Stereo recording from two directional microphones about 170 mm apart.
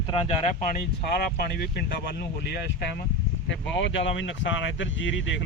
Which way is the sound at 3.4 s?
90° left.